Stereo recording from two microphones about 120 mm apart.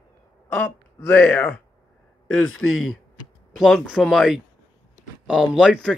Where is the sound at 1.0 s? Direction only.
15° left (ahead or behind).